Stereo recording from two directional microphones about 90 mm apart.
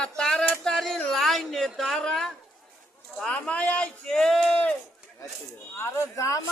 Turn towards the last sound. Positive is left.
turn(degrees=35)  # may be behind; listen again after turning